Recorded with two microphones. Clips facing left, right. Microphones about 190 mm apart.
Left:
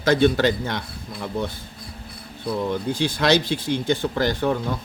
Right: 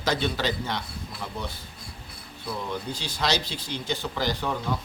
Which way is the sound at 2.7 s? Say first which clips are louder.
Left 9 dB; 55° left (ahead or behind).